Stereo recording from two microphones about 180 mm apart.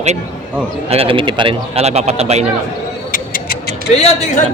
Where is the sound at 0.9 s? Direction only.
30° right (ahead or behind).